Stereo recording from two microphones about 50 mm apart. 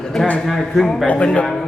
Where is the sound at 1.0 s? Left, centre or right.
Left.